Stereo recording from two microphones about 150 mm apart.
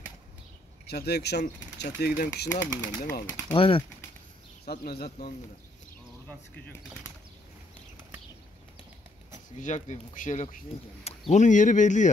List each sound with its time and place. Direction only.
0.8 s speech: 90° left
2.8 s speech: 60° left (ahead or behind)
3.5 s speech: 35° left (ahead or behind)
4.6 s speech: 90° left
9.6 s speech: 50° left (ahead or behind)